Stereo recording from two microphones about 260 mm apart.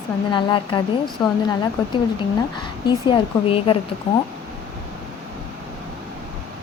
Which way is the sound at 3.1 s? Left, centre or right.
Left.